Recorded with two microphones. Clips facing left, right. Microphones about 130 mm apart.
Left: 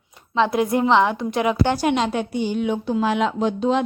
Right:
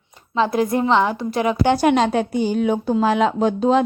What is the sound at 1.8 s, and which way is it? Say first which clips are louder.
Speech: right 4 dB; 50° right (ahead or behind).